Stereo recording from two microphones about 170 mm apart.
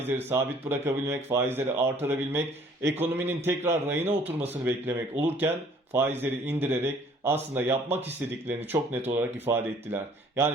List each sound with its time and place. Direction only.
0.1 s speech: 10° right (ahead or behind)
4.2 s speech: 35° right (ahead or behind)
4.4 s speech: 10° right (ahead or behind)